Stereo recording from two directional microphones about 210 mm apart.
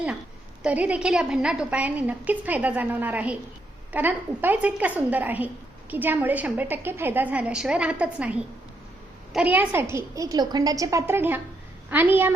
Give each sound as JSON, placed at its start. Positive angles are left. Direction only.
{"t": 0.6, "sound": "a woman's voice", "side_deg": -5}